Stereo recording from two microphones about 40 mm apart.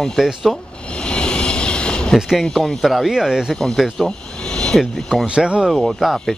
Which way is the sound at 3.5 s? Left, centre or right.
Centre.